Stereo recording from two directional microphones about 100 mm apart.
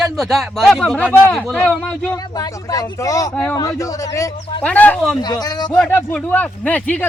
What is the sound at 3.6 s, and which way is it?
Speech, 35° left (ahead or behind).